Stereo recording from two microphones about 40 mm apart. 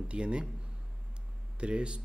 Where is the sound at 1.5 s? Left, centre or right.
Right.